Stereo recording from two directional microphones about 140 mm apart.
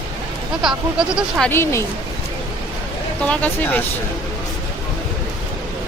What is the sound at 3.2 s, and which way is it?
Speech, 10° left (ahead or behind).